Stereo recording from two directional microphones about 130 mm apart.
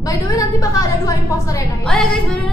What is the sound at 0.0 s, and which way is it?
A woman's voice, 25° left (ahead or behind).